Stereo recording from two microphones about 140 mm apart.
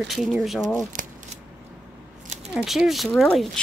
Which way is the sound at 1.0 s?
65° right (ahead or behind).